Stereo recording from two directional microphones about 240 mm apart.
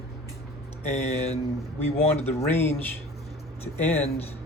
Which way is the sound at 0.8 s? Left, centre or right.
Left.